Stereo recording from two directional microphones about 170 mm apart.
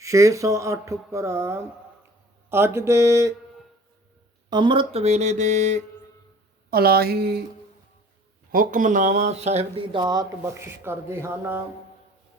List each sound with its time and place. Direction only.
0.0 s speech: 20° right (ahead or behind)
4.4 s speech: 25° right (ahead or behind); by 5.8 s 45° right (ahead or behind)
6.7 s speech: 60° right (ahead or behind)
8.5 s speech: 50° right (ahead or behind); by 11.6 s 15° right (ahead or behind)